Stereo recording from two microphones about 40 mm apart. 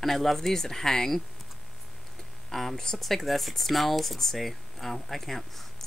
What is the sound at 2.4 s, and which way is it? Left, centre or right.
Speech, centre.